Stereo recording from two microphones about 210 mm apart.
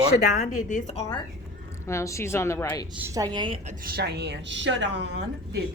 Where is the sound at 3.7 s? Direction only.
45° right (ahead or behind).